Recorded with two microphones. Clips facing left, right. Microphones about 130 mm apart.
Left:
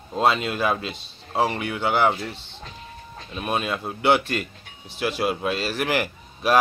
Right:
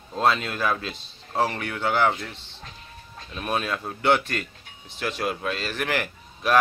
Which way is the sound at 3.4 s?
10° left (ahead or behind).